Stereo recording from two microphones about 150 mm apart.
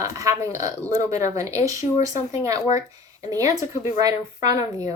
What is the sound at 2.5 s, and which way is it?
Speech, 50° left (ahead or behind).